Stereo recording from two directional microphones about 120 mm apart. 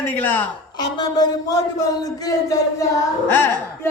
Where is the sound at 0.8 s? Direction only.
35° left (ahead or behind).